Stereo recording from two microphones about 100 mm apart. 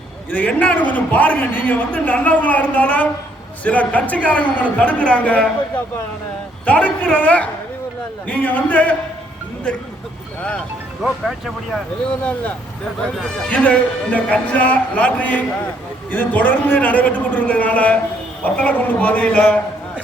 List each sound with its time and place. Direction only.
0.3 s a man's voice: 15° left (ahead or behind)
11.0 s speech: centre (ahead or behind)
12.2 s a man's voice: 15° left (ahead or behind)